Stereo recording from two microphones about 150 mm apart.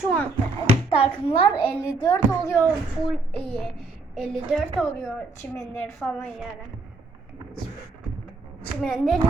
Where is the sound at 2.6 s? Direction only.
5° left (ahead or behind).